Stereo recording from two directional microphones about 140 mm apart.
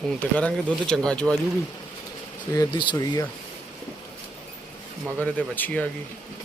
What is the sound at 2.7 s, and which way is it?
Speech, 30° left (ahead or behind).